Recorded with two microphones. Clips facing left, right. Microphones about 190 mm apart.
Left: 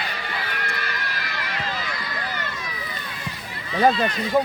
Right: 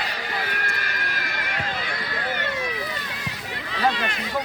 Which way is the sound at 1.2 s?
50° right (ahead or behind).